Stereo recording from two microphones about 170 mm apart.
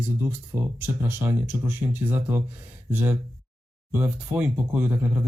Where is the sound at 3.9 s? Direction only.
20° right (ahead or behind).